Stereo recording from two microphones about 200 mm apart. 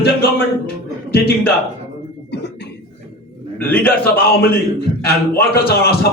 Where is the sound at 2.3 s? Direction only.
55° left (ahead or behind).